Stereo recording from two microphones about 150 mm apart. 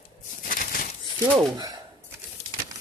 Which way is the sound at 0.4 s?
70° left (ahead or behind).